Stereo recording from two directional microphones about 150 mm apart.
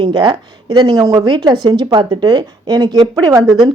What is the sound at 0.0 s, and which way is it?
A woman's voice, 30° right (ahead or behind).